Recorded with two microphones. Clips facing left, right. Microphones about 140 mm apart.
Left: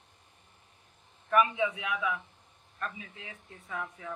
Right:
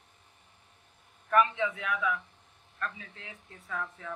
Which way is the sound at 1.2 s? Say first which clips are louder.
Even; 10° left (ahead or behind).